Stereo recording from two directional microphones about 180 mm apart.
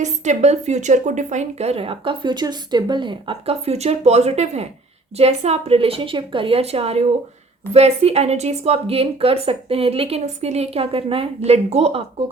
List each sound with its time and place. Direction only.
0.0 s speech: 40° right (ahead or behind)